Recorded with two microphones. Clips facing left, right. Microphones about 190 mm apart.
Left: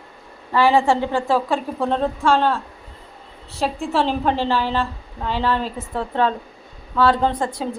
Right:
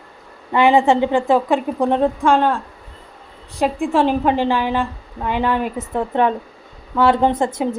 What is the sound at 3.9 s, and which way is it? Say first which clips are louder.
A woman's voice: right 3 dB; 10° right (ahead or behind).